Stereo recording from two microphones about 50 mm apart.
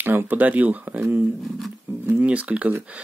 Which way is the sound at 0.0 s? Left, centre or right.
Right.